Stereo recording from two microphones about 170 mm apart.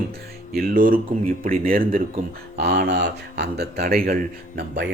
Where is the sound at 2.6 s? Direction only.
75° right (ahead or behind).